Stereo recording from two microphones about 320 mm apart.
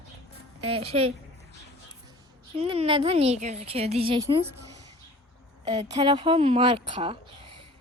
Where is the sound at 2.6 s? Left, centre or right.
Centre.